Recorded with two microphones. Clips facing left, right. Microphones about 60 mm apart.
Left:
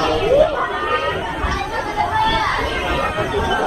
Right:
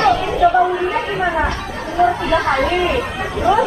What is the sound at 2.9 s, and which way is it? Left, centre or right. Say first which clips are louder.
Speech: left 1 dB; left.